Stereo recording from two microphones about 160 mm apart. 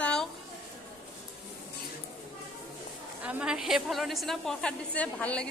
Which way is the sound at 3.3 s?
5° right (ahead or behind).